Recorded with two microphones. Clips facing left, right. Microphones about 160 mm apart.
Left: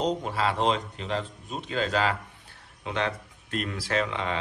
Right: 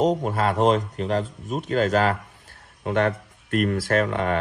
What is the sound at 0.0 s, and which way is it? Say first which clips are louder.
Speech: right 5 dB; 45° right (ahead or behind).